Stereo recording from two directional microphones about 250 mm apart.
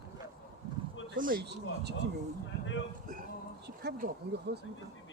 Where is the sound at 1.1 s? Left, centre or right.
Right.